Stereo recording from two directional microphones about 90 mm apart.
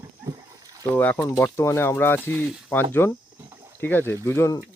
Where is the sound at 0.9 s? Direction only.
20° left (ahead or behind).